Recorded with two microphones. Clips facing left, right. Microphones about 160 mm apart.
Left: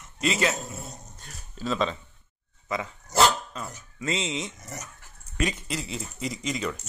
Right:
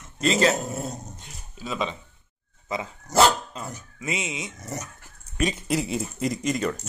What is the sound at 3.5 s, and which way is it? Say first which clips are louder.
Speech: right 1 dB; 15° right (ahead or behind).